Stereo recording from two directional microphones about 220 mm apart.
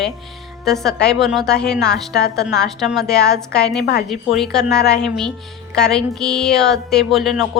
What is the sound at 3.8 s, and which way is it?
Speech, 45° left (ahead or behind).